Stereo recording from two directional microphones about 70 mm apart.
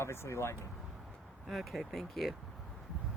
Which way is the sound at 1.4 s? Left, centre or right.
Centre.